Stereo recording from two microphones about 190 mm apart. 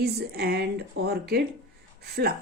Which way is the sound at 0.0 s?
55° right (ahead or behind).